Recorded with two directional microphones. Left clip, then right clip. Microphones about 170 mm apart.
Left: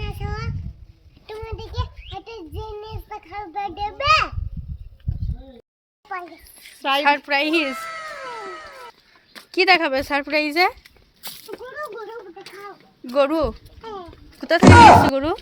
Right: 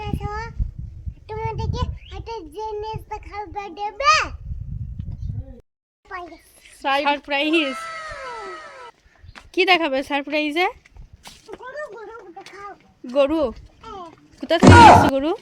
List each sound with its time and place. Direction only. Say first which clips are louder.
0.0 s child singing: right 3 dB; 20° right (ahead or behind)
6.1 s a child's voice: left 2 dB; 25° right (ahead or behind)
7.7 s a sound: even; centre (ahead or behind)
9.5 s a woman's voice: left 1 dB; 20° right (ahead or behind)
13.1 s a woman's voice: even; 25° right (ahead or behind)
14.6 s speech: even; centre (ahead or behind)
15.1 s a woman's voice: even; 30° right (ahead or behind)